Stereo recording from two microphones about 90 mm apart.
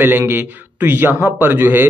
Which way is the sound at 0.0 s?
25° right (ahead or behind).